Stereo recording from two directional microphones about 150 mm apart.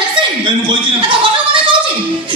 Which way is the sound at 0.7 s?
35° right (ahead or behind).